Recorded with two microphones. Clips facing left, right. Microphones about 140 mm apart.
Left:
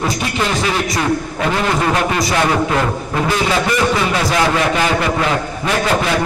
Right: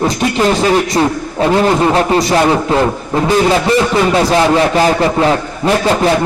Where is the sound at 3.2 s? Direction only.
30° right (ahead or behind).